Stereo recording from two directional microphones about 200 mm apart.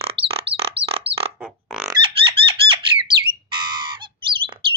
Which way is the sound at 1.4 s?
5° right (ahead or behind).